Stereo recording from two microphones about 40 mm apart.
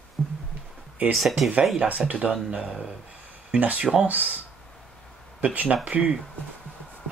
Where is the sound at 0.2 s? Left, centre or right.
Left.